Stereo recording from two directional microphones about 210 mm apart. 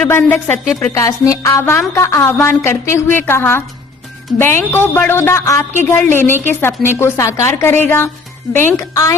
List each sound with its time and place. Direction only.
0.0 s a woman's voice: 10° left (ahead or behind)